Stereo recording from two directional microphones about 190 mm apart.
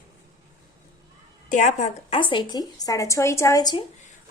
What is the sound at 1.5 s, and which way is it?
A woman's voice, 40° left (ahead or behind).